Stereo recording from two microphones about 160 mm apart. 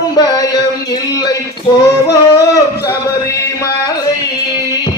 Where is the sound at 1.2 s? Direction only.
25° left (ahead or behind).